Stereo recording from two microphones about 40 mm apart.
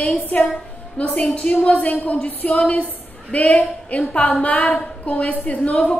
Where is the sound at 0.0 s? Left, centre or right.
Left.